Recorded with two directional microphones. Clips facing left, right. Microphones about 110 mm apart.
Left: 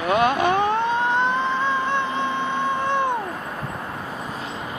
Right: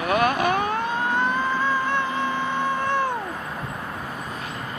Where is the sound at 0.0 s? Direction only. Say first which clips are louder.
Left 2 dB; 25° left (ahead or behind).